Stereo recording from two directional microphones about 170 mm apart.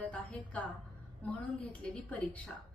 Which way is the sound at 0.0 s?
5° left (ahead or behind).